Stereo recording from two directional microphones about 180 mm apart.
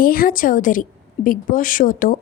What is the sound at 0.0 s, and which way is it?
A woman's voice, 55° left (ahead or behind).